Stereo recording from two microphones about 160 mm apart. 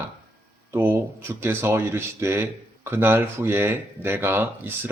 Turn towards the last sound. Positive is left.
turn(degrees=-15)  # may be behind; listen again after turning